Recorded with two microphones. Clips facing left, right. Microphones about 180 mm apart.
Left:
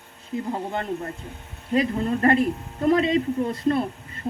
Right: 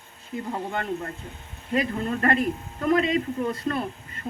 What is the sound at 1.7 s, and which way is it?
A man's voice, 25° left (ahead or behind).